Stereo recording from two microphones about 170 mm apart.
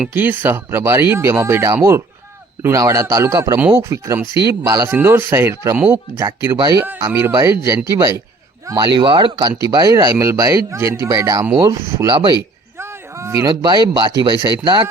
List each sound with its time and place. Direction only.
0.0 s speech: 10° right (ahead or behind)